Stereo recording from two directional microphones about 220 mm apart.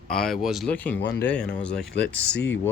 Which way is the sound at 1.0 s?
50° left (ahead or behind).